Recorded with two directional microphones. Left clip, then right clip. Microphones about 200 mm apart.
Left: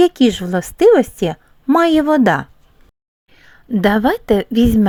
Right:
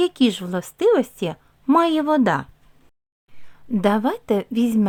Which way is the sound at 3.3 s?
20° left (ahead or behind).